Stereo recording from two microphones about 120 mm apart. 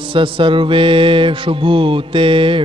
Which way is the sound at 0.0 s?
45° right (ahead or behind).